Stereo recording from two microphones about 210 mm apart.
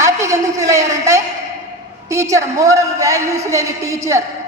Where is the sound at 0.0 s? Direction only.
15° right (ahead or behind).